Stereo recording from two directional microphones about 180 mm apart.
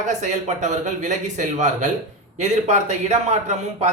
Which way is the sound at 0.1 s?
40° right (ahead or behind).